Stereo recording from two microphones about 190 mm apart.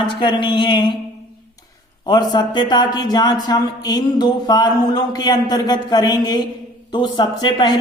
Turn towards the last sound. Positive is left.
turn(degrees=20)  # may be behind; listen again after turning